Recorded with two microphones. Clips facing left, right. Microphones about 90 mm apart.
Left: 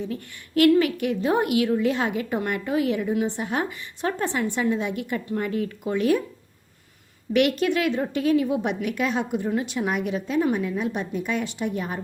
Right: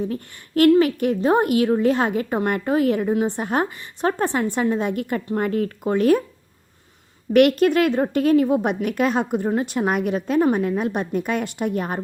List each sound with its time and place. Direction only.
0.0 s a woman's voice: 40° right (ahead or behind)
7.3 s a woman's voice: 50° right (ahead or behind)